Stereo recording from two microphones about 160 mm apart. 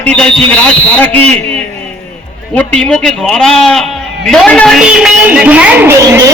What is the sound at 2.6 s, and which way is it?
A man's voice, 10° left (ahead or behind).